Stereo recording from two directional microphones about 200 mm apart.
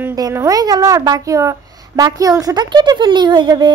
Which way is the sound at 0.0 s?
15° right (ahead or behind).